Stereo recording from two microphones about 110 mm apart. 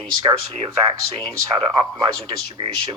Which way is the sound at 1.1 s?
45° right (ahead or behind).